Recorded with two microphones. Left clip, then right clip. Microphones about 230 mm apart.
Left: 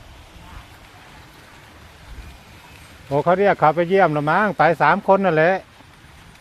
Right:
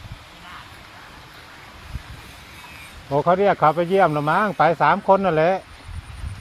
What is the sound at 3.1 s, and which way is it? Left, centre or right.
Speech, centre.